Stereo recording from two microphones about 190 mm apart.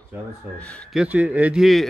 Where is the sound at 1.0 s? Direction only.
10° right (ahead or behind).